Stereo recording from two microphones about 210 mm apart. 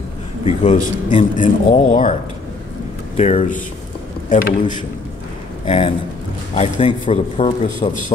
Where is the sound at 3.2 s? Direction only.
30° left (ahead or behind).